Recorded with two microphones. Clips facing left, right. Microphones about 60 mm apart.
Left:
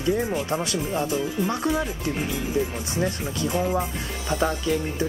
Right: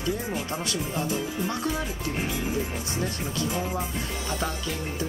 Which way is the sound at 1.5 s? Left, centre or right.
Left.